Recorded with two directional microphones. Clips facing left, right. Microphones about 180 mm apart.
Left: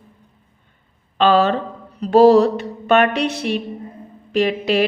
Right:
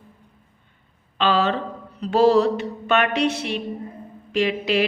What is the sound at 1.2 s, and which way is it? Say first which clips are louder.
A woman's voice: left 5 dB; 45° left (ahead or behind).